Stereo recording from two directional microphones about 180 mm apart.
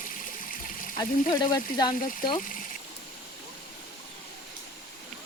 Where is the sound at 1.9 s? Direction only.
50° left (ahead or behind).